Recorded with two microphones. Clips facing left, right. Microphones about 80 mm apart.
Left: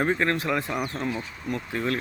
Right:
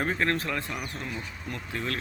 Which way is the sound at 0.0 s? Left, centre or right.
Centre.